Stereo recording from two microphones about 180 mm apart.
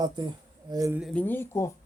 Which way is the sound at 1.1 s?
10° left (ahead or behind).